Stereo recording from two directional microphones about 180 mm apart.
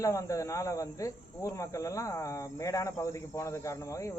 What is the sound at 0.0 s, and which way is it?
Speech, 15° left (ahead or behind).